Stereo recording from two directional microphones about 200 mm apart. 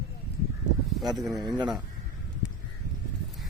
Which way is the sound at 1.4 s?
20° right (ahead or behind).